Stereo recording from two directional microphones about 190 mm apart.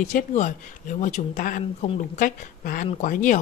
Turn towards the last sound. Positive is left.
turn(degrees=40)  # may be behind; listen again after turning